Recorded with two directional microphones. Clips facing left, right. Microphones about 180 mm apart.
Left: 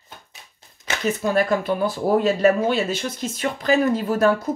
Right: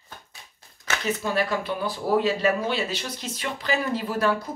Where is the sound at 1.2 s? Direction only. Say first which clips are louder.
Left 8 dB; 45° left (ahead or behind).